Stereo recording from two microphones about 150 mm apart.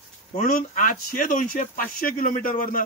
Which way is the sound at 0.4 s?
65° left (ahead or behind).